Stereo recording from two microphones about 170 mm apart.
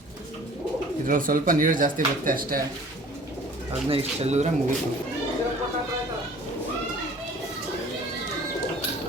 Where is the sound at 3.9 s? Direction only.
35° right (ahead or behind).